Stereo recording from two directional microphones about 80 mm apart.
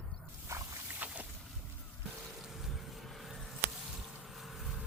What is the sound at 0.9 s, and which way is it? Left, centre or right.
Boat, centre.